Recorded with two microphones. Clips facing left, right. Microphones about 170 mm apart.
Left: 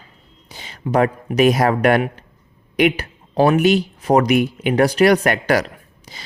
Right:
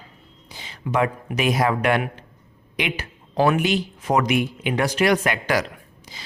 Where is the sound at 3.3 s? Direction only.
35° left (ahead or behind); by 5.6 s 55° left (ahead or behind).